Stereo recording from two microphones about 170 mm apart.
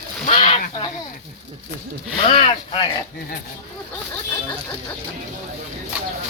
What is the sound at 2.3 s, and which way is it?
Speech, 40° left (ahead or behind).